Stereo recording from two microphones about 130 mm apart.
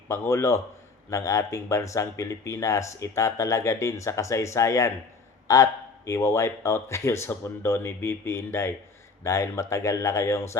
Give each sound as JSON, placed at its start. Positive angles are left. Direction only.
{"t": 0.1, "sound": "speech", "side_deg": 20}